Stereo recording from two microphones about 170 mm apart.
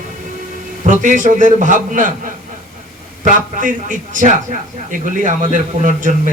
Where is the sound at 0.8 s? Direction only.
50° right (ahead or behind).